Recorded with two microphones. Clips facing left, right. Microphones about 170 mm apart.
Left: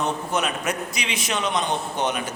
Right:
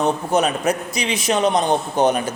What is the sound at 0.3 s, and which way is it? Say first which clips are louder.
A man's voice: right 7 dB; 35° right (ahead or behind).